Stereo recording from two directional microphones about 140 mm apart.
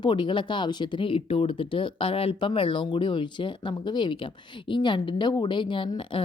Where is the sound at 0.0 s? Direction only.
35° left (ahead or behind).